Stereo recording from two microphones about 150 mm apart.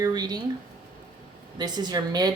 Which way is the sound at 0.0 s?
25° right (ahead or behind).